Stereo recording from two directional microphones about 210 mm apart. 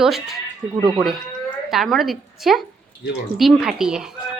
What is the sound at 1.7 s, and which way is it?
Speech, centre (ahead or behind).